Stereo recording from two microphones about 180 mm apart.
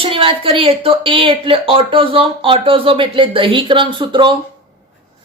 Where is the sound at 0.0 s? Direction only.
30° right (ahead or behind).